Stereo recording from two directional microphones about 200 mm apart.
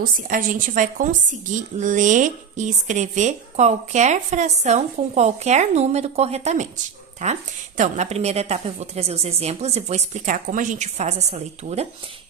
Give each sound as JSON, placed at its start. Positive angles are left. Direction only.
{"t": 0.0, "sound": "speech", "side_deg": -45}